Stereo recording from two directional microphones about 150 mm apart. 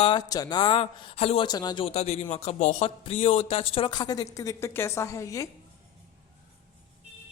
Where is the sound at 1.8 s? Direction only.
45° left (ahead or behind); by 5.4 s 20° left (ahead or behind).